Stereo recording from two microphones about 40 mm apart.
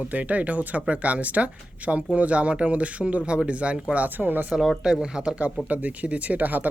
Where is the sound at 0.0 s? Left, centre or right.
Right.